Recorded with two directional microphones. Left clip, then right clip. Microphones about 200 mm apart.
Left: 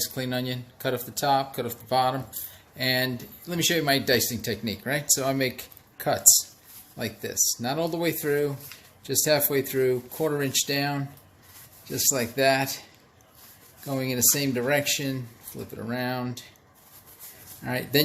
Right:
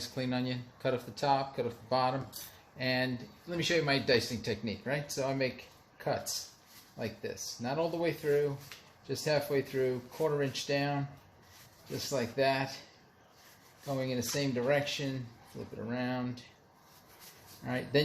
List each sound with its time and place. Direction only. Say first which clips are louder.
0.0 s speech: left 6 dB; 25° left (ahead or behind)
7.0 s speech: left 11 dB; 40° left (ahead or behind)
13.8 s speech: left 8 dB; 45° left (ahead or behind)
17.6 s speech: left 6 dB; 35° left (ahead or behind)